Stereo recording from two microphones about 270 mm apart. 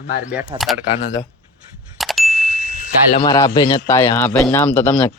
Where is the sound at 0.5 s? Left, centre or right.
Centre.